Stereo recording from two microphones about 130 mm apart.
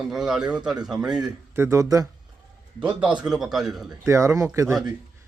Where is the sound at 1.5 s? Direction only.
20° right (ahead or behind).